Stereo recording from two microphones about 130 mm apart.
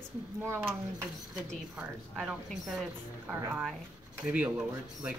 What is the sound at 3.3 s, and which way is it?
Speech, 15° right (ahead or behind).